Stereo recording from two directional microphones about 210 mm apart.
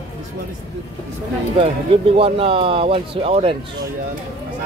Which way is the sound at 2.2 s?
25° right (ahead or behind).